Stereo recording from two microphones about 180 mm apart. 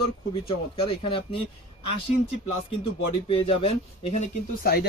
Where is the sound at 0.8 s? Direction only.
30° left (ahead or behind).